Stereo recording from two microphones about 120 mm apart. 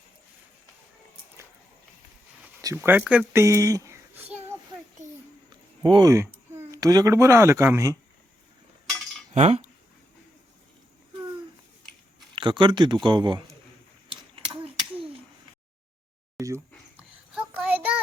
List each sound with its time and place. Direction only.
2.7 s speech: 15° right (ahead or behind)
3.4 s speech: 25° right (ahead or behind)
5.5 s a sound: 40° right (ahead or behind)
6.1 s speech: 25° right (ahead or behind)
9.3 s cutlery: 70° right (ahead or behind)
12.3 s speech: 40° right (ahead or behind)
14.3 s a sound: 50° right (ahead or behind)
17.0 s child singing: 10° right (ahead or behind)